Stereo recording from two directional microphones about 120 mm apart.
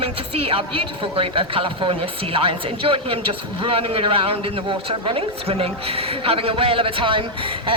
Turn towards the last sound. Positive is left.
turn(degrees=-45)  # may be behind; listen again after turning